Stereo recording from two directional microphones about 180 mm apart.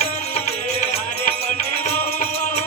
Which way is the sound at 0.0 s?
35° left (ahead or behind).